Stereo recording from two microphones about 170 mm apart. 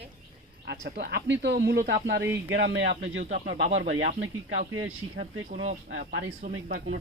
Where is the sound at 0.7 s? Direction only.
75° right (ahead or behind).